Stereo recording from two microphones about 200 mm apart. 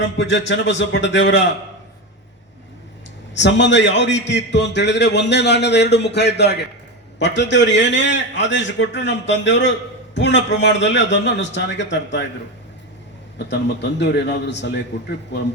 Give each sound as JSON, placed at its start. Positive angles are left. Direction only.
{"t": 0.0, "sound": "a man's voice", "side_deg": 60}
{"t": 3.3, "sound": "a man's voice", "side_deg": 60}
{"t": 13.5, "sound": "a man's voice", "side_deg": 60}